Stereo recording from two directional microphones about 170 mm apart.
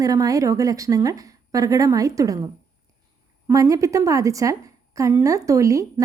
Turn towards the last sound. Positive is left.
turn(degrees=-20)  # may be behind; listen again after turning